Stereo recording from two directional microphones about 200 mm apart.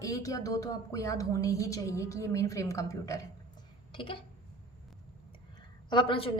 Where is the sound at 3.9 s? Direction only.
25° left (ahead or behind).